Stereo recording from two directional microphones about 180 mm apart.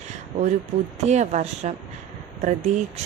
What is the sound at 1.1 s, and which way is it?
Speech, 40° right (ahead or behind).